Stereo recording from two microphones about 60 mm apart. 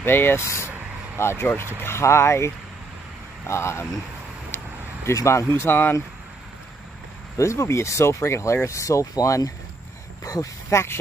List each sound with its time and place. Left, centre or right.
0.0 s speech: left
5.0 s speech: left
7.3 s speech: left
10.7 s speech: left